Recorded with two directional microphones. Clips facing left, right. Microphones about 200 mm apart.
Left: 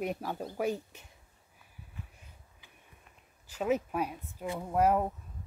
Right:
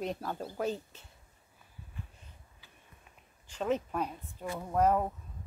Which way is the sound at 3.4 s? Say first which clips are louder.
Left 2 dB; 5° left (ahead or behind).